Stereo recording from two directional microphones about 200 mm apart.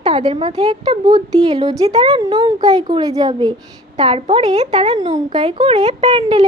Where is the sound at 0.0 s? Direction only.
25° right (ahead or behind).